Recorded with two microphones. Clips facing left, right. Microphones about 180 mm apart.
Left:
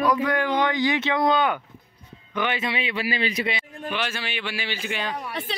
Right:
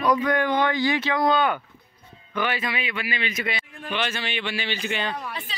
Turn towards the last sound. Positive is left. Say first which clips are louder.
# right 1 dB
turn(degrees=5)  # may be behind; listen again after turning